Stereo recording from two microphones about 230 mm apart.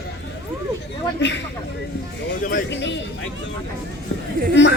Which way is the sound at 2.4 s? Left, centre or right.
Left.